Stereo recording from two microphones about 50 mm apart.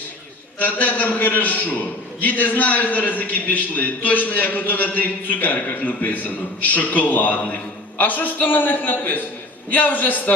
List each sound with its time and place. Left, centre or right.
0.6 s a man's voice: left